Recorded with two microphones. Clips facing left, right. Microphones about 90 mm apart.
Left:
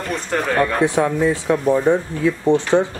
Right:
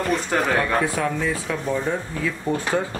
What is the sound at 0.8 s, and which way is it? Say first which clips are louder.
Speech: left 6 dB; 25° left (ahead or behind).